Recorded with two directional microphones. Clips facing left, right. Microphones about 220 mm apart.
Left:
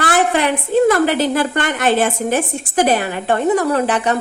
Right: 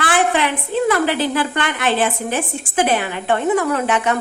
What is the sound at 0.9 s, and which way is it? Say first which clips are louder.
Speech: left 3 dB; 45° left (ahead or behind).